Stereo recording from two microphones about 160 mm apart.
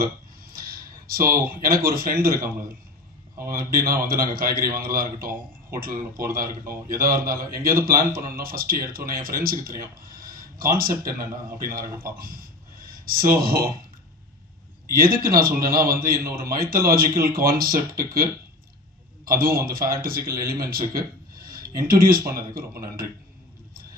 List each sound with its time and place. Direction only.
0.0 s a man's voice: 65° right (ahead or behind)
14.9 s a man's voice: 65° right (ahead or behind)
19.2 s a man's voice: 65° right (ahead or behind)